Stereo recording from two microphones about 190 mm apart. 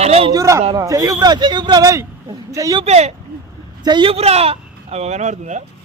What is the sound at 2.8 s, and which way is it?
Speech, 35° right (ahead or behind).